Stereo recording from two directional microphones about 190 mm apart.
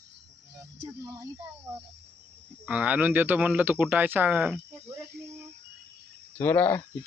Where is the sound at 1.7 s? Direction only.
15° right (ahead or behind).